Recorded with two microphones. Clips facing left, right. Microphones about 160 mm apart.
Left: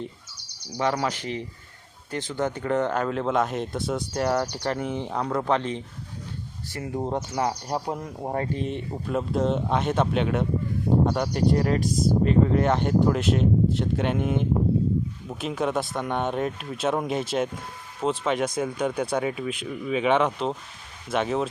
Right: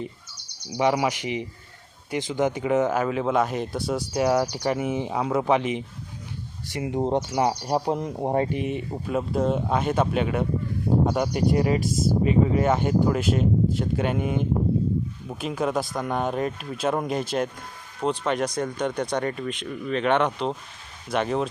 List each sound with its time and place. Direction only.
0.8 s speech: 15° right (ahead or behind)
8.9 s speech: centre (ahead or behind)